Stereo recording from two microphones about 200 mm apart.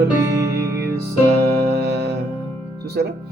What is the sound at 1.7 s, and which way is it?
Music, 55° right (ahead or behind).